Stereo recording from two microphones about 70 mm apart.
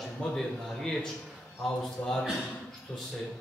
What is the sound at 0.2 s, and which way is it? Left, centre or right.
A man's voice, centre.